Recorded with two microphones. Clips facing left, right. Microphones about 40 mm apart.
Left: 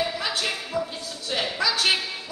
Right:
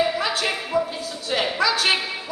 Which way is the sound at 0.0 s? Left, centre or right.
Centre.